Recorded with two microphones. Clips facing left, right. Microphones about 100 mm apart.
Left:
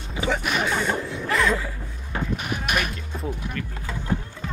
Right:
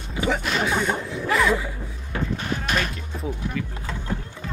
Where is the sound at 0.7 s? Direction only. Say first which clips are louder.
Right 1 dB; 5° right (ahead or behind).